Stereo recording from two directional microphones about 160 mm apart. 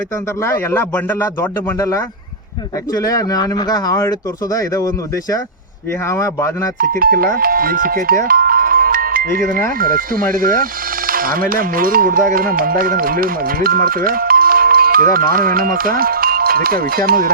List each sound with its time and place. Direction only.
0.4 s a man's voice: 15° left (ahead or behind)
6.1 s a man's voice: 15° left (ahead or behind)
6.7 s speech: 65° right (ahead or behind)
7.3 s music: 65° right (ahead or behind)
9.8 s speech: 65° right (ahead or behind)